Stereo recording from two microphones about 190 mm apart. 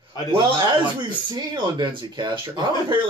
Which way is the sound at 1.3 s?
20° right (ahead or behind).